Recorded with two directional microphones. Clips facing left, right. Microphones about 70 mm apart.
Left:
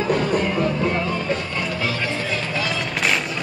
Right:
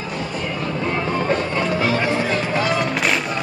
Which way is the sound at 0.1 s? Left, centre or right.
Left.